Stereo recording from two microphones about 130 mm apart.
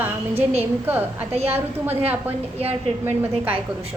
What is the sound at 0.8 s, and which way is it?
Speech, 15° right (ahead or behind).